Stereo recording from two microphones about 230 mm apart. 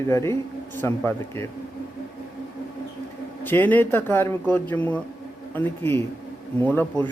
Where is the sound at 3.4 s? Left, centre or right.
Centre.